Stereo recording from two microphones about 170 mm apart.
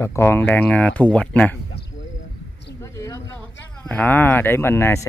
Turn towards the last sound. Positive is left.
turn(degrees=15)  # may be behind; listen again after turning